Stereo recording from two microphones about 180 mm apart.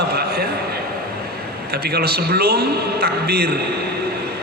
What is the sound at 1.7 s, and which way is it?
A man's voice, 60° right (ahead or behind).